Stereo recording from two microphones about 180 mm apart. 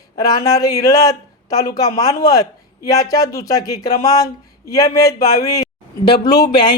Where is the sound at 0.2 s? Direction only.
20° left (ahead or behind).